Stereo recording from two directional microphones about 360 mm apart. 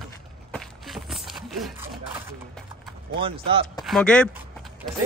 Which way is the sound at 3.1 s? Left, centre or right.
Centre.